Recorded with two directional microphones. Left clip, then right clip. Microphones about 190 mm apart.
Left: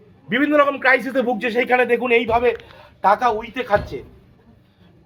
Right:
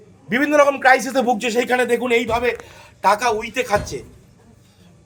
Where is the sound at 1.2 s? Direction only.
10° left (ahead or behind).